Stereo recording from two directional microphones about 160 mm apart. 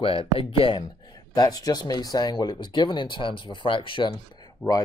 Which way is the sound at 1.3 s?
25° left (ahead or behind).